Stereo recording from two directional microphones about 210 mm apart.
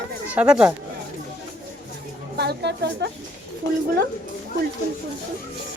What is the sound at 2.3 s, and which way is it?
Speech, 50° right (ahead or behind).